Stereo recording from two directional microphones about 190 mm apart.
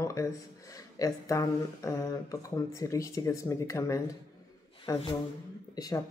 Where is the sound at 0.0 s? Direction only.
15° left (ahead or behind).